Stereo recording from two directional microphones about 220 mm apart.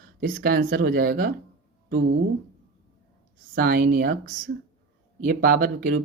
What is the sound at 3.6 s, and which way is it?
Speech, 40° right (ahead or behind).